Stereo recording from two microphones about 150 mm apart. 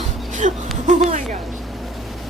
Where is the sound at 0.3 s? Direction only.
55° right (ahead or behind).